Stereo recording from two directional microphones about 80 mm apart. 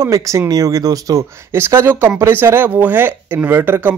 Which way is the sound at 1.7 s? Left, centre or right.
Right.